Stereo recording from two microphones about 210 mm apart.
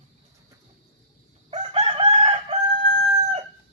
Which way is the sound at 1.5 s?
30° right (ahead or behind).